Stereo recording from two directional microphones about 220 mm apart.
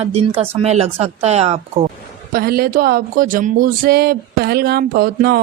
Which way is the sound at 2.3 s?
45° right (ahead or behind).